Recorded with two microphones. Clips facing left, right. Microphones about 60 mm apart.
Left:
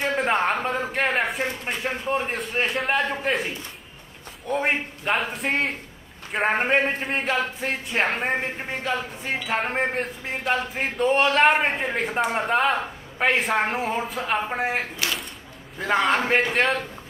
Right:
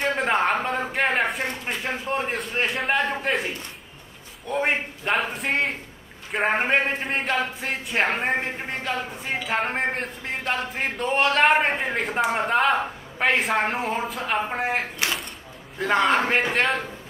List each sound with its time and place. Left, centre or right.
0.0 s speech: centre
4.5 s speech: centre
15.0 s a sound: right
15.8 s speech: centre